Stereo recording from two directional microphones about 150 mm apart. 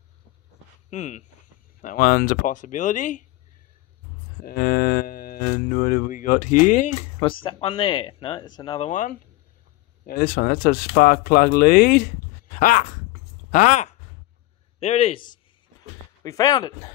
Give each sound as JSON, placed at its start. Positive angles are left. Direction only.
{"t": 0.8, "sound": "speech", "side_deg": 50}
{"t": 1.8, "sound": "speech", "side_deg": 60}
{"t": 4.4, "sound": "speech", "side_deg": 90}
{"t": 7.2, "sound": "speech", "side_deg": 35}
{"t": 8.7, "sound": "speech", "side_deg": 55}
{"t": 10.0, "sound": "speech", "side_deg": 75}
{"t": 12.5, "sound": "a sound", "side_deg": 65}
{"t": 13.5, "sound": "speech", "side_deg": 55}
{"t": 14.8, "sound": "speech", "side_deg": 40}
{"t": 16.3, "sound": "speech", "side_deg": 25}